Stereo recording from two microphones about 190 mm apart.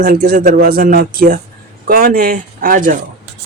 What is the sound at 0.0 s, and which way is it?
Speech, 55° right (ahead or behind).